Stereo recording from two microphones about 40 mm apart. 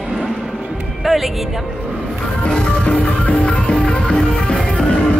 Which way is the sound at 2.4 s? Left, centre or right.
Left.